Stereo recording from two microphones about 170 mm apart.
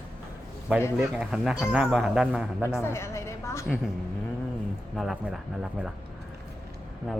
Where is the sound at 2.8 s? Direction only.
15° left (ahead or behind).